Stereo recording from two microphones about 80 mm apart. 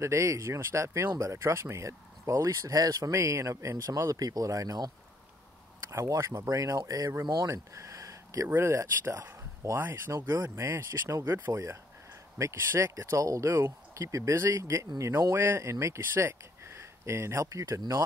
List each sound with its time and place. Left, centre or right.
0.0 s speech: right
3.1 s speech: right
5.9 s speech: right
7.4 s a sound: right
8.5 s speech: right
9.8 s speech: right